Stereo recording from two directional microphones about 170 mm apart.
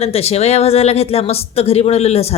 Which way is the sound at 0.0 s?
35° left (ahead or behind).